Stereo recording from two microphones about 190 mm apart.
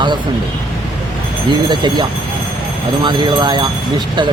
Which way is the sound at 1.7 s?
25° right (ahead or behind).